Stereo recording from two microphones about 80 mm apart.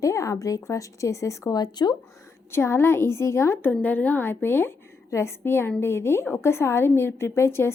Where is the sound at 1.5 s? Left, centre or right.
Left.